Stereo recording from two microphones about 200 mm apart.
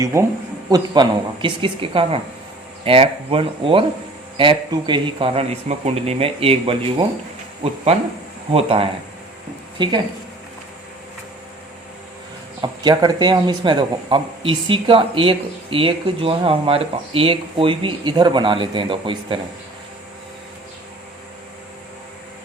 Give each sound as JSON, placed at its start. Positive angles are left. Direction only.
{"t": 0.0, "sound": "speech", "side_deg": -15}
{"t": 8.5, "sound": "speech", "side_deg": -25}
{"t": 12.6, "sound": "speech", "side_deg": -20}